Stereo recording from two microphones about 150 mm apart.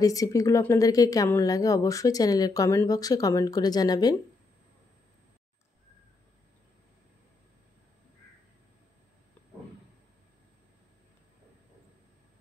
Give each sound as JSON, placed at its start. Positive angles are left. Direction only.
{"t": 0.0, "sound": "speech", "side_deg": 20}